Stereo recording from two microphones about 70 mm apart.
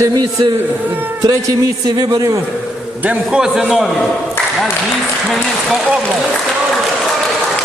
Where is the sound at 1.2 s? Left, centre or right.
Right.